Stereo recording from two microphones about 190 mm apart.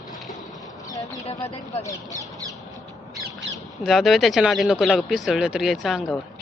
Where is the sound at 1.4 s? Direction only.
35° left (ahead or behind).